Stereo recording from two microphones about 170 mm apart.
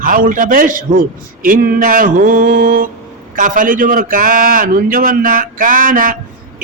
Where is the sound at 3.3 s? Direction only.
50° right (ahead or behind).